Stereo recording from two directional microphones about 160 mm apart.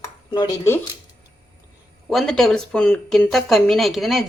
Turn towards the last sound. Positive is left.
turn(degrees=0)  # may be behind; listen again after turning